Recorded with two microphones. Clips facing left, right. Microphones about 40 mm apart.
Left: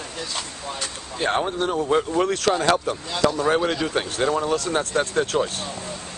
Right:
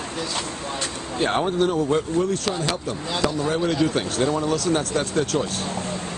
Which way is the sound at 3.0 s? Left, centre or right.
Centre.